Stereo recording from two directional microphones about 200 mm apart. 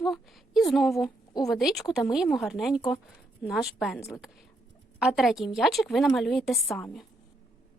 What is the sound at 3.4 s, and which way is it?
Speech, centre (ahead or behind).